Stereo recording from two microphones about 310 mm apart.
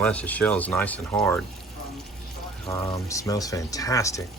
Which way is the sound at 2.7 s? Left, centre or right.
Centre.